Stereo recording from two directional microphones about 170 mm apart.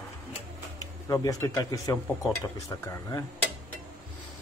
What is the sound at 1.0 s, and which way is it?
Speech, 20° left (ahead or behind).